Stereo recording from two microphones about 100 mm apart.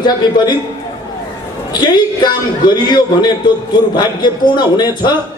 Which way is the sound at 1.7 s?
45° left (ahead or behind).